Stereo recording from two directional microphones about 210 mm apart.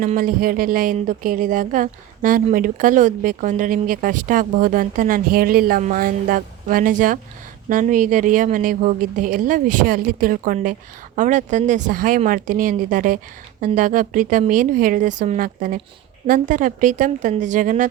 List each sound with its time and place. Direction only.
0.0 s speech: 40° right (ahead or behind)